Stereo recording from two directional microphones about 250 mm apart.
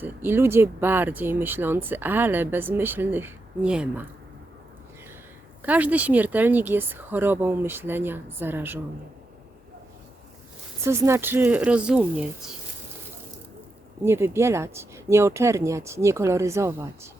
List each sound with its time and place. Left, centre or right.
0.0 s speech: centre
5.6 s speech: centre
10.8 s speech: centre
14.0 s speech: centre